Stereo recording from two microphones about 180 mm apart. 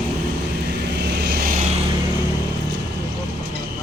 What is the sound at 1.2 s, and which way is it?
Vehicle, 60° right (ahead or behind).